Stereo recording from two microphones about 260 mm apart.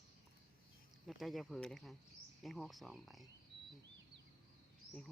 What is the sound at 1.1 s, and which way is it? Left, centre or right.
Speech, centre.